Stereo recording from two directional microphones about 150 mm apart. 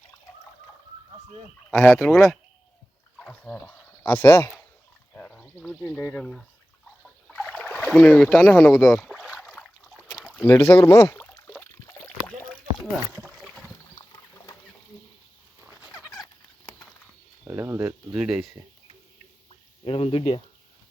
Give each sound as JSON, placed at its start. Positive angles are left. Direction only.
{"t": 2.0, "sound": "speech", "side_deg": 5}
{"t": 3.2, "sound": "a sound", "side_deg": 10}
{"t": 4.0, "sound": "speech", "side_deg": 15}
{"t": 7.0, "sound": "a sound", "side_deg": 5}
{"t": 7.9, "sound": "speech", "side_deg": 5}
{"t": 9.4, "sound": "boat", "side_deg": 10}
{"t": 10.0, "sound": "rowboat", "side_deg": 10}
{"t": 12.5, "sound": "a sound", "side_deg": 0}
{"t": 16.0, "sound": "fowl", "side_deg": 25}
{"t": 17.4, "sound": "speech", "side_deg": -15}
{"t": 18.1, "sound": "speech", "side_deg": -5}
{"t": 19.5, "sound": "a sound", "side_deg": 40}